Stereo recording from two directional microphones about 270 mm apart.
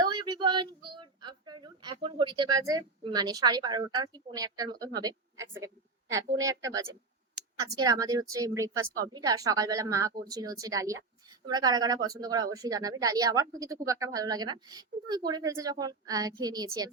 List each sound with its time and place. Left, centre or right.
0.0 s speech: centre